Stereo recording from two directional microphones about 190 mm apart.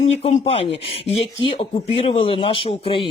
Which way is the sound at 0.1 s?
35° left (ahead or behind).